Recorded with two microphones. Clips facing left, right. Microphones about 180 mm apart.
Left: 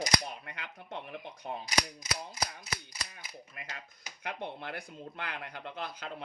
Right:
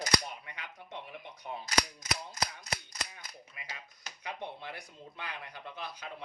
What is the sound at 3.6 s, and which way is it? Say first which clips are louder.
Speech: left 1 dB; 50° left (ahead or behind).